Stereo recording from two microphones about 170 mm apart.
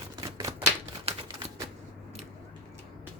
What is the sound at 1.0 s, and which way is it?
Typewriter, 30° right (ahead or behind).